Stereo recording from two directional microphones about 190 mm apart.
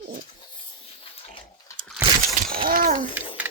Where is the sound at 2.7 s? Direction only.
50° right (ahead or behind).